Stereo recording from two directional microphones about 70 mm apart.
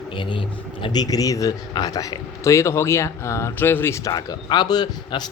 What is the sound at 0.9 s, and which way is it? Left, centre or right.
A man's voice, left.